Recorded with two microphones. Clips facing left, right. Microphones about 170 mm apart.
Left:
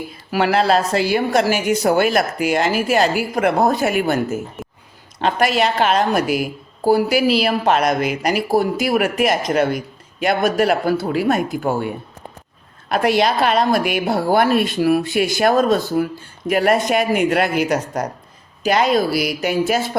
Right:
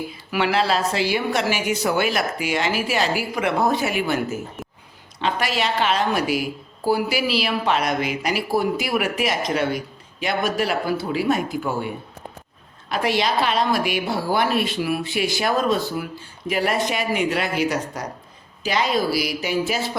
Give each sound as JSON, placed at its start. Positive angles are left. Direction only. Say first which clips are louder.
{"t": 0.3, "sound": "speech", "louder": "left 5 dB", "side_deg": 45}
{"t": 13.1, "sound": "speech", "louder": "left 3 dB", "side_deg": 50}